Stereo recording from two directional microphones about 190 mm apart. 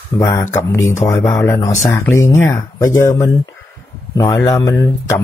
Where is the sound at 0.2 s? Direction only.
15° left (ahead or behind).